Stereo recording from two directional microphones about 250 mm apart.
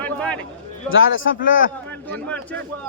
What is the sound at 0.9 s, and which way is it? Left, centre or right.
Speech, left.